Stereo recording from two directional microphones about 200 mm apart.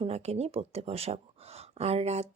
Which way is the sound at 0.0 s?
30° right (ahead or behind).